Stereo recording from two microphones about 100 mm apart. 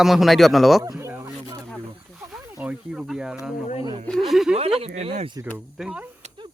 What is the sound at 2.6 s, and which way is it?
Speech, 15° right (ahead or behind).